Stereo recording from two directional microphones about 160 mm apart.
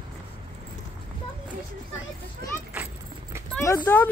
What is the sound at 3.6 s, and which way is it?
Speech, 15° left (ahead or behind).